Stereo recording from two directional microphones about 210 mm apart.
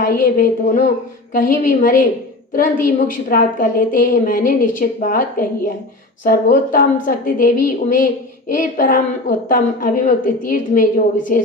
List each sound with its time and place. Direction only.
0.0 s a woman's voice: 40° left (ahead or behind)